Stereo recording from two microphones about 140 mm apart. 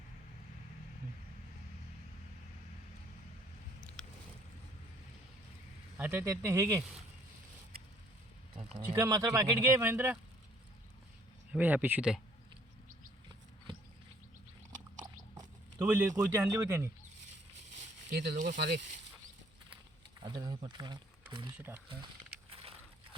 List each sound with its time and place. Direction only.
4.0 s boat: 5° left (ahead or behind)
6.0 s speech: 15° right (ahead or behind)
8.9 s speech: 25° right (ahead or behind)
11.5 s speech: 10° right (ahead or behind)
15.8 s speech: 15° right (ahead or behind)
18.1 s speech: 75° right (ahead or behind)
20.2 s speech: 30° right (ahead or behind)
21.8 s a sound: 40° right (ahead or behind)